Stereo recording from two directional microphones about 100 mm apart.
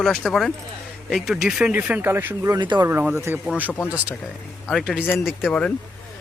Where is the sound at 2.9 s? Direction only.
15° right (ahead or behind).